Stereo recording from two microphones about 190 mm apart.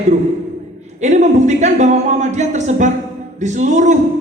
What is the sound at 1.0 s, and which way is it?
Speech, 40° right (ahead or behind).